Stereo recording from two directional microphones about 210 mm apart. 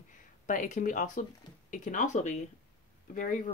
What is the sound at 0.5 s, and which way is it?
Speech, 40° left (ahead or behind).